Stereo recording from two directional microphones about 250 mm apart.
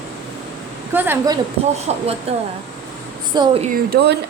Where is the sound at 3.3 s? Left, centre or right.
Centre.